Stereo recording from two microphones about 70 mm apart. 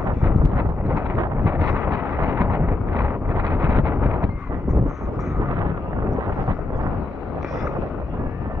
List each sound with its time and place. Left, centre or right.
2.2 s a sound: right
2.9 s wind noise: right
3.7 s wind noise: right